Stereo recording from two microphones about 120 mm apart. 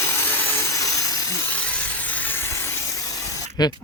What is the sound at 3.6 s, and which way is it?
Speech, 35° left (ahead or behind).